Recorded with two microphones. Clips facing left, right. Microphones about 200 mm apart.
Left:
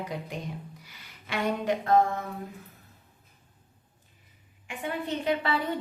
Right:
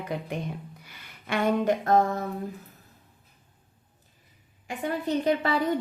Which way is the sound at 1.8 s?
40° right (ahead or behind).